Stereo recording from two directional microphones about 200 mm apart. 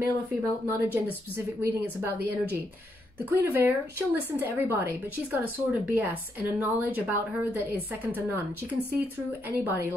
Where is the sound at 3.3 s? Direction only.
10° right (ahead or behind).